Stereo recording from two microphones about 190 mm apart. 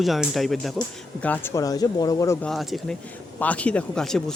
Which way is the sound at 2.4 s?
Centre (ahead or behind).